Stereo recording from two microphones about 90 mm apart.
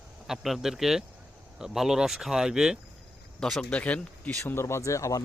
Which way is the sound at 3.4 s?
5° left (ahead or behind).